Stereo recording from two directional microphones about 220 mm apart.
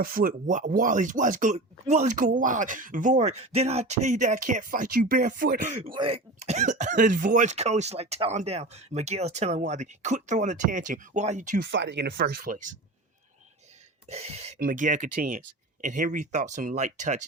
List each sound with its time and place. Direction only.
0.0 s speech: 40° right (ahead or behind)
11.6 s speech: 55° right (ahead or behind); by 12.7 s 35° right (ahead or behind)
14.1 s speech: 30° right (ahead or behind)